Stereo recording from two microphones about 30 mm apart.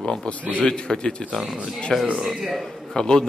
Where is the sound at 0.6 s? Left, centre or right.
Left.